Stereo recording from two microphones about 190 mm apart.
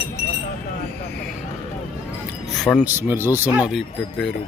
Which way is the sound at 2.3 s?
Centre (ahead or behind).